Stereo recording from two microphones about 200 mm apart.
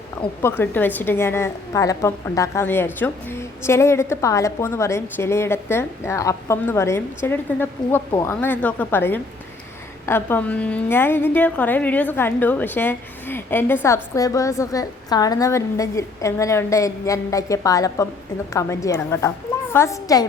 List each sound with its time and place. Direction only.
0.4 s a woman's voice: 10° left (ahead or behind)